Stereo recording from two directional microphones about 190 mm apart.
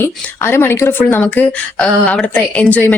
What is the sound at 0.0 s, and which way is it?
Speech, 10° left (ahead or behind).